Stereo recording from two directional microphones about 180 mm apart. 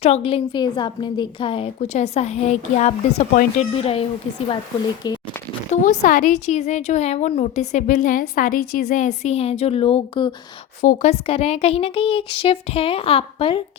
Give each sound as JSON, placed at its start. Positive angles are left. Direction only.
{"t": 0.0, "sound": "a woman's voice", "side_deg": 35}
{"t": 5.0, "sound": "speech", "side_deg": 25}
{"t": 5.7, "sound": "a woman's voice", "side_deg": 45}
{"t": 10.8, "sound": "a woman's voice", "side_deg": 40}